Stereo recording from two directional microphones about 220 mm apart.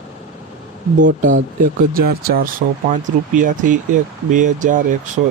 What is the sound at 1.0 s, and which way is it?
Speech, 35° right (ahead or behind).